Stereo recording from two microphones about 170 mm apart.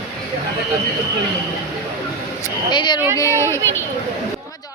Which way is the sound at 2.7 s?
25° left (ahead or behind).